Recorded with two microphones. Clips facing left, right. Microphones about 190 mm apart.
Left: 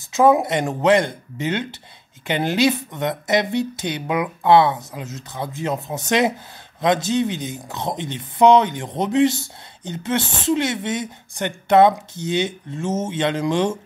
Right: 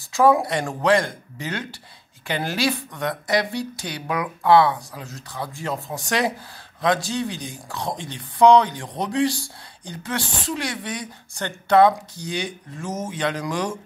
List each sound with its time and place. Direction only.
0.1 s speech: 20° left (ahead or behind)